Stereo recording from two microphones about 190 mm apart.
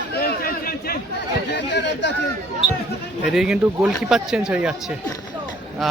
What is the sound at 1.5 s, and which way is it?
Speech, 65° left (ahead or behind).